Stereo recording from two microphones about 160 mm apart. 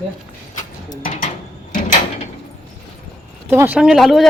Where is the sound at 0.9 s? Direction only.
60° left (ahead or behind).